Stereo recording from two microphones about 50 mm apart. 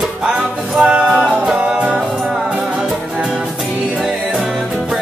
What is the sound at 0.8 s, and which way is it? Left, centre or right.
Music, centre.